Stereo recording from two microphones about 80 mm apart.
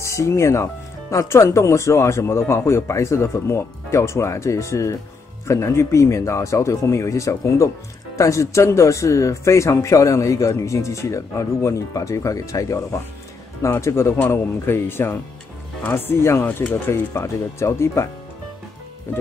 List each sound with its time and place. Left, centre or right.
0.0 s speech: left